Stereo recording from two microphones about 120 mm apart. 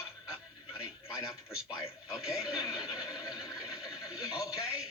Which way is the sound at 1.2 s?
25° left (ahead or behind).